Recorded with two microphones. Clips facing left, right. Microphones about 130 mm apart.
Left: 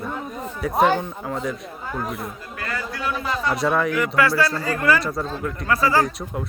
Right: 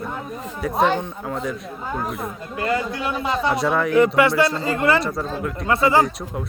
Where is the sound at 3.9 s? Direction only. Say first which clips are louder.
Right 4 dB; 25° right (ahead or behind).